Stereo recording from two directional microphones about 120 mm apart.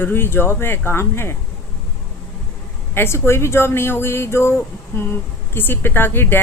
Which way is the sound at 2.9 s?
20° left (ahead or behind).